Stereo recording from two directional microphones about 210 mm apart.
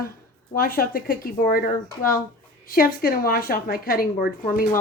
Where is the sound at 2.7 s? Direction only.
45° left (ahead or behind).